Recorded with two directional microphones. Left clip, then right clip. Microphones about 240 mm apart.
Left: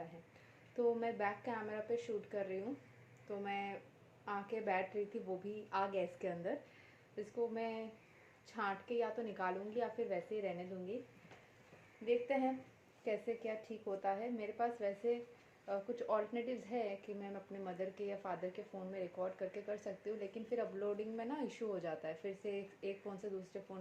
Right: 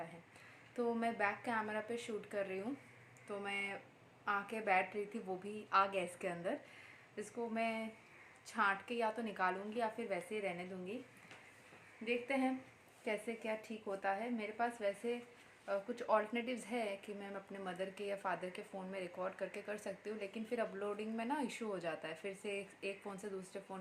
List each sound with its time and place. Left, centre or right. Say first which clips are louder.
0.8 s a woman's voice: left 1 dB; right
12.0 s a woman's voice: left 2 dB; right